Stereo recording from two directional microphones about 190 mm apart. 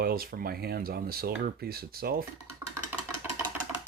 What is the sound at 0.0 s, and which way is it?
Speech, 50° right (ahead or behind).